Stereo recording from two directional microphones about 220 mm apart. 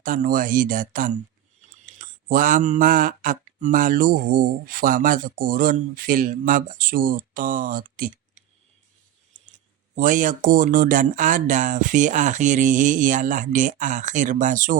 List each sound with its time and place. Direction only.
0.0 s speech: 40° right (ahead or behind)
9.9 s speech: 35° right (ahead or behind)